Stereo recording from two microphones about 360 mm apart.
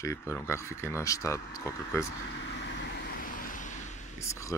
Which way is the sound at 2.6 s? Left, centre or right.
Left.